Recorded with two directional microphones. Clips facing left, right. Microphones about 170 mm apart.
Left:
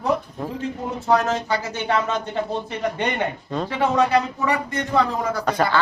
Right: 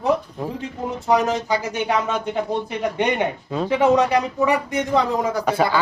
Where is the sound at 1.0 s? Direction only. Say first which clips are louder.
Right 1 dB; 15° right (ahead or behind).